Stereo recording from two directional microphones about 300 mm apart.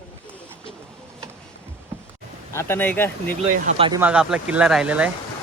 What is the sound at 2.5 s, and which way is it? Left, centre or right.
Speech, centre.